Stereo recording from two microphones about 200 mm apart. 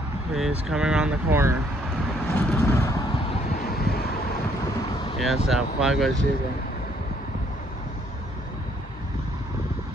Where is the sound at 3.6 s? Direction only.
50° left (ahead or behind).